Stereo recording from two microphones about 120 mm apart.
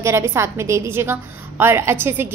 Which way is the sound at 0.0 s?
20° right (ahead or behind).